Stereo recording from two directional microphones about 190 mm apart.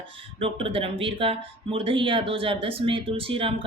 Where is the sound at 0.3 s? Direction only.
30° right (ahead or behind).